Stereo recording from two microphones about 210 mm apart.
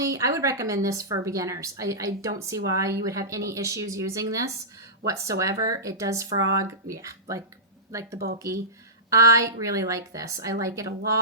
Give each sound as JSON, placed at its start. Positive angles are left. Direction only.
{"t": 0.0, "sound": "a woman's voice", "side_deg": -15}
{"t": 9.0, "sound": "a woman's voice", "side_deg": -15}